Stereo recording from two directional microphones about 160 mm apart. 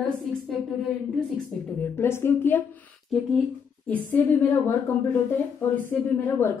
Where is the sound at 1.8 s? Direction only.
15° left (ahead or behind).